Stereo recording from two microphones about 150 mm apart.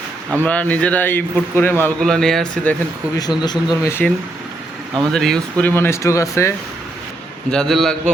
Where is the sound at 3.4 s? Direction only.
30° left (ahead or behind).